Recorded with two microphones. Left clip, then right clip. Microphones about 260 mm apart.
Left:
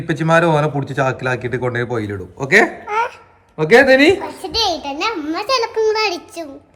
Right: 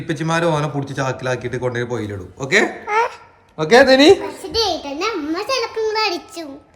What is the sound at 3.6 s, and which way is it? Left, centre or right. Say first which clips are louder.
Speech: left 1 dB; centre.